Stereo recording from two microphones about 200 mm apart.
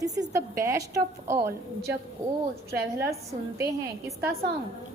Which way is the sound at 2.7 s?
55° right (ahead or behind).